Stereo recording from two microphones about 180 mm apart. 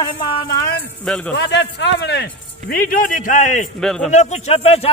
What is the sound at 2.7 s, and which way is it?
A man's voice, 50° left (ahead or behind).